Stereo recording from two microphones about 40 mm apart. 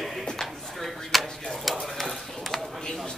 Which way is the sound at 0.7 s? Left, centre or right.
Centre.